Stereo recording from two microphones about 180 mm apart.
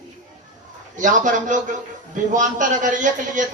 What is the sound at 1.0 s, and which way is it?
A man's voice, 45° right (ahead or behind).